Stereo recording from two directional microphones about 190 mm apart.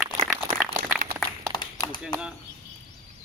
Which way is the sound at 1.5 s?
25° left (ahead or behind).